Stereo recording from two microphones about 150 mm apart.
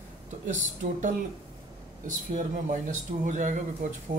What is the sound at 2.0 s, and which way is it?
Speech, 55° right (ahead or behind).